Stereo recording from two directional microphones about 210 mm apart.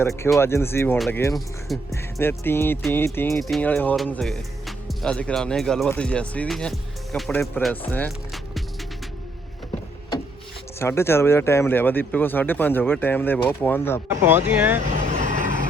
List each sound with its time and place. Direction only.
0.3 s speech: 10° left (ahead or behind)
0.9 s speech: centre (ahead or behind)
1.9 s speech: 15° left (ahead or behind)
7.9 s music: 10° left (ahead or behind)
10.8 s speech: 10° left (ahead or behind)
14.1 s speech: 10° right (ahead or behind)
15.1 s vehicle: 35° right (ahead or behind)